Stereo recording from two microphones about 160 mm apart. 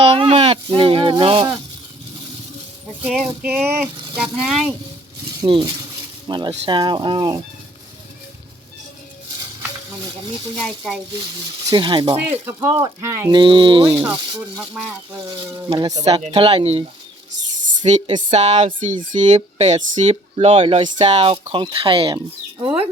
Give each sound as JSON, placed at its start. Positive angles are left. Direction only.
{"t": 0.0, "sound": "speech", "side_deg": -35}
{"t": 3.0, "sound": "speech", "side_deg": -5}
{"t": 5.4, "sound": "speech", "side_deg": -30}
{"t": 10.6, "sound": "speech", "side_deg": -5}
{"t": 11.6, "sound": "speech", "side_deg": -25}
{"t": 12.1, "sound": "speech", "side_deg": -10}
{"t": 13.4, "sound": "speech", "side_deg": -30}
{"t": 14.6, "sound": "speech", "side_deg": -10}
{"t": 15.3, "sound": "speech", "side_deg": -25}
{"t": 15.9, "sound": "speech", "side_deg": -45}
{"t": 17.9, "sound": "speech", "side_deg": -45}